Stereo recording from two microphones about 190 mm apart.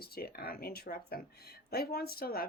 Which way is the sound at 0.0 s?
55° left (ahead or behind).